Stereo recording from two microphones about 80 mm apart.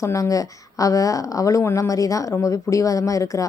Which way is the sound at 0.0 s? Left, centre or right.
Left.